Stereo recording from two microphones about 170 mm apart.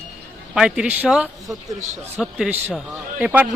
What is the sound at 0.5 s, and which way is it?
Speech, 5° right (ahead or behind).